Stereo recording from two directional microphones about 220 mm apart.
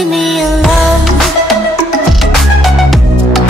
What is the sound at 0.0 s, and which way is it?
Music, centre (ahead or behind).